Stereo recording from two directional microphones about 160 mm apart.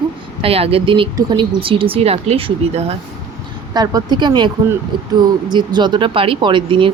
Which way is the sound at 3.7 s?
25° right (ahead or behind).